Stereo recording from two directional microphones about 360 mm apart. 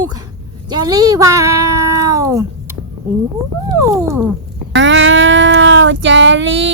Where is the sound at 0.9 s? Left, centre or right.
Centre.